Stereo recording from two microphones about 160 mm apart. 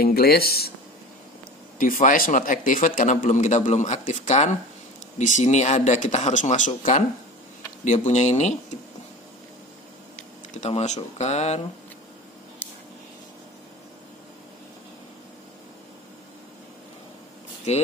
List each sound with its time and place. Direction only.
0.0 s speech: 75° left (ahead or behind)
1.8 s speech: 55° left (ahead or behind)
10.5 s speech: 45° left (ahead or behind)